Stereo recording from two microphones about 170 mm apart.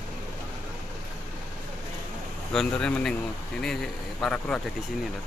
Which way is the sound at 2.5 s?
5° left (ahead or behind).